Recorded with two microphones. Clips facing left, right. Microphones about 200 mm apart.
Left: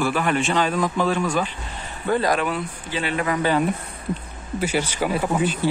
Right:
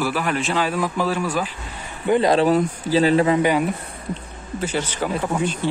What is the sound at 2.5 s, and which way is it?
Speech, 35° right (ahead or behind).